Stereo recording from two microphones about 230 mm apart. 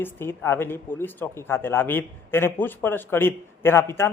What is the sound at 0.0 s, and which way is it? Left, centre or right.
Speech, centre.